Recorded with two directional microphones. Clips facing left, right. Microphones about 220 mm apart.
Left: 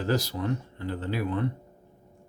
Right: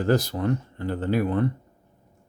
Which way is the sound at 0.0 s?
55° right (ahead or behind).